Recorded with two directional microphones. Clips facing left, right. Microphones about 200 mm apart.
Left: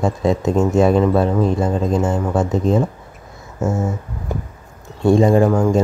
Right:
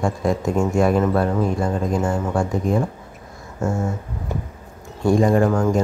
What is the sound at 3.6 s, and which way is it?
Speech, 5° left (ahead or behind).